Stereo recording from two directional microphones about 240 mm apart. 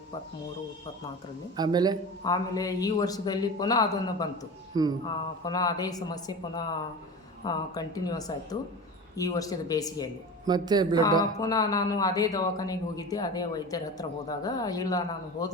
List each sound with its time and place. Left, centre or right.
1.5 s speech: centre
2.2 s speech: centre
4.7 s speech: centre
5.0 s speech: centre
10.4 s speech: centre
11.2 s speech: centre